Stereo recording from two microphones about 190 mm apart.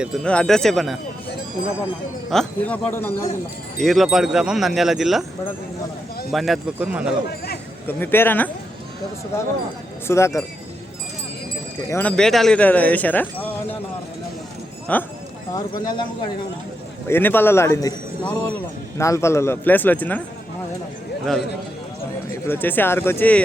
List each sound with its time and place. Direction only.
0.0 s speech: centre (ahead or behind)
2.3 s speech: 5° left (ahead or behind)
3.8 s speech: centre (ahead or behind)
6.3 s speech: centre (ahead or behind)
7.9 s speech: 10° left (ahead or behind)
10.1 s speech: 15° left (ahead or behind)
11.9 s speech: 10° left (ahead or behind)
14.9 s speech: 10° left (ahead or behind)
15.5 s speech: 20° left (ahead or behind)
17.1 s speech: 10° left (ahead or behind)
22.4 s speech: 10° left (ahead or behind)